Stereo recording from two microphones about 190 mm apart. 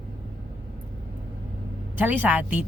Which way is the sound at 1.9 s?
10° right (ahead or behind).